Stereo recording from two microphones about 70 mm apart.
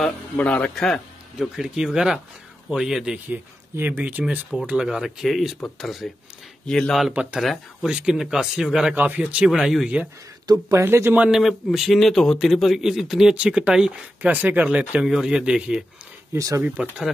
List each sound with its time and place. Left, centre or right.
0.4 s speech: centre
0.7 s speech: centre
1.6 s a man's voice: centre
3.7 s speech: right
4.6 s a man's voice: centre
7.3 s speech: centre
8.9 s speech: right
9.5 s a man's voice: centre
10.7 s speech: right
11.1 s a man's voice: centre
15.0 s speech: centre
16.3 s speech: right
16.6 s speech: right